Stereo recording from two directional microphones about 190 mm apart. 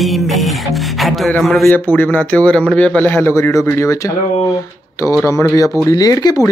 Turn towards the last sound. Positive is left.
turn(degrees=20)  # may be behind; listen again after turning